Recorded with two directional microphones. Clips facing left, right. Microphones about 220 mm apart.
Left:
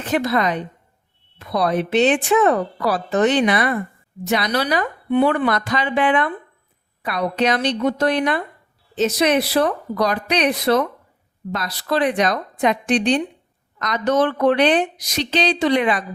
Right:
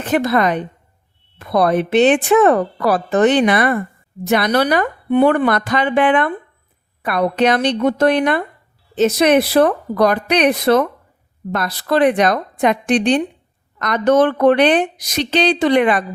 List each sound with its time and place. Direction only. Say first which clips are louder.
0.0 s a woman's voice: right 4 dB; 55° right (ahead or behind)